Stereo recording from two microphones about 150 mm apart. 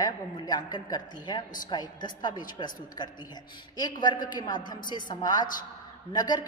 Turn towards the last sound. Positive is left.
turn(degrees=25)  # may be behind; listen again after turning